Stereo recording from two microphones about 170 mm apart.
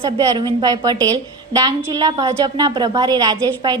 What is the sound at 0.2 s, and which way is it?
A woman's voice, 25° right (ahead or behind).